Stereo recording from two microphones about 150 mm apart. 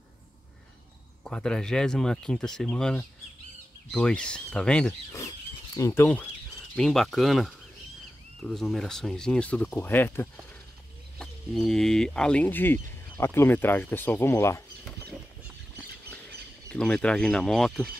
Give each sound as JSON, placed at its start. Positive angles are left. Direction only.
{"t": 1.2, "sound": "speech", "side_deg": 5}
{"t": 5.8, "sound": "speech", "side_deg": 20}
{"t": 6.8, "sound": "speech", "side_deg": 0}
{"t": 11.1, "sound": "speech", "side_deg": 5}
{"t": 16.6, "sound": "speech", "side_deg": 5}